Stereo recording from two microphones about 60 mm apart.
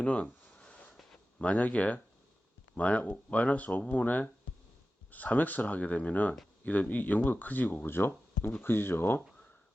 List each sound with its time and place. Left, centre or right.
0.0 s a sound: left
1.1 s speech: left
7.9 s speech: left